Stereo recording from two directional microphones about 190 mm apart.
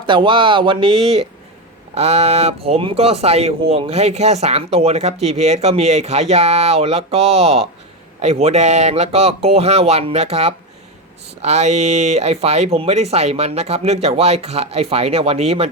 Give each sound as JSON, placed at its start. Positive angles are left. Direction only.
{"t": 0.0, "sound": "speech", "side_deg": -25}